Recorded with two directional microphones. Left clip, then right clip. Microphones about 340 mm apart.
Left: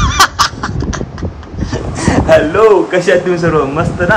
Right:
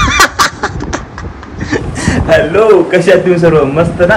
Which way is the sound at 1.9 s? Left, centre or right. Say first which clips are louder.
Left 2 dB; centre.